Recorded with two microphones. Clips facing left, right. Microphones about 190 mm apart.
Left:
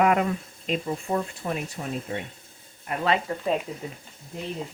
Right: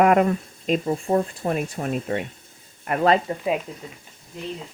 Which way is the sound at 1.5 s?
60° right (ahead or behind).